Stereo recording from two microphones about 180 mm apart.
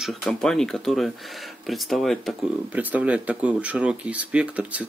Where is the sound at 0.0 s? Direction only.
Centre (ahead or behind).